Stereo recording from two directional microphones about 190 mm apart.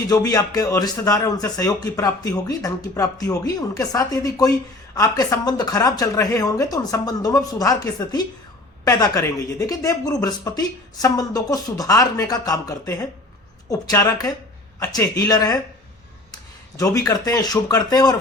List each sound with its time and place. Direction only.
0.1 s a man's voice: 20° left (ahead or behind)